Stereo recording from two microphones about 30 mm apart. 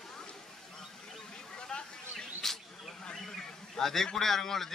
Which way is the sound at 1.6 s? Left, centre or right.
Left.